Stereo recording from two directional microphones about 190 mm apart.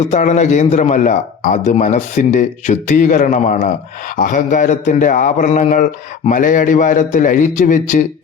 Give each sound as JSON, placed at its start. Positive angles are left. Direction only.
{"t": 0.0, "sound": "a man's voice", "side_deg": 35}